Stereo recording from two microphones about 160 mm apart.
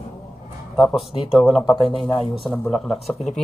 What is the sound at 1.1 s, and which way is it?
Speech, 30° left (ahead or behind).